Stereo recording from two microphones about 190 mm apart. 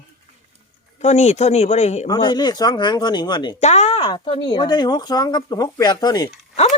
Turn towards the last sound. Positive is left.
turn(degrees=35)  # may be behind; listen again after turning